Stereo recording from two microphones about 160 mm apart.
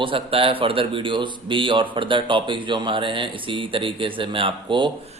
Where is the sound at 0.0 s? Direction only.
35° right (ahead or behind).